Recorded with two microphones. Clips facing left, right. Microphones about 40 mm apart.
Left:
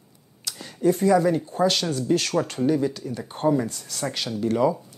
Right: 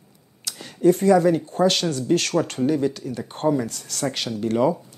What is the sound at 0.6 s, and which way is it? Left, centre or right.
Speech, right.